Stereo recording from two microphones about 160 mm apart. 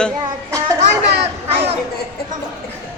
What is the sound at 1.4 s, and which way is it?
Speech, 40° right (ahead or behind).